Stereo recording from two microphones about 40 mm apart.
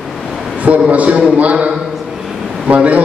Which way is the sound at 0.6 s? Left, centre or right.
Right.